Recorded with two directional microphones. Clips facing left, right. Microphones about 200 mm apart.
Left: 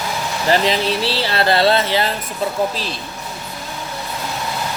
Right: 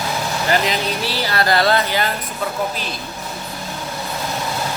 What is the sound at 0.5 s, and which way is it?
Speech, 30° left (ahead or behind).